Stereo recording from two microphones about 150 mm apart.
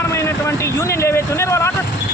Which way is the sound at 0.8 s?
20° left (ahead or behind).